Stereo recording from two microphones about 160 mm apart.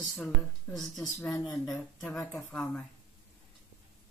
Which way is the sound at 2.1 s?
15° left (ahead or behind).